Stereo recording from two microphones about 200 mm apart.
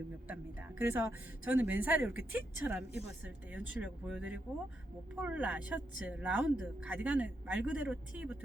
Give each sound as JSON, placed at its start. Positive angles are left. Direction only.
{"t": 0.8, "sound": "speech", "side_deg": -10}